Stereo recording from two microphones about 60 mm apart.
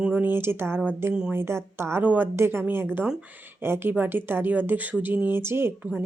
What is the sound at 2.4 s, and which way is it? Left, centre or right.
A woman's voice, right.